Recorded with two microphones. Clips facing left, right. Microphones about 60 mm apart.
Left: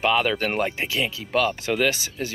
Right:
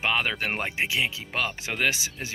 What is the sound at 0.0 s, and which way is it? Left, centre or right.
Speech, centre.